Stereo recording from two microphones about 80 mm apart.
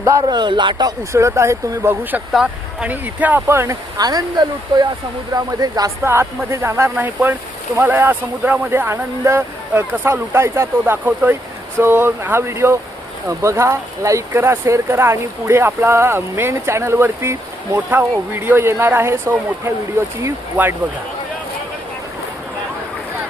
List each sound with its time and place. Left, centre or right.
0.2 s speech: right
1.1 s speech: right
3.5 s speech: right
3.9 s speech: right
6.0 s speech: right
7.0 s speech: right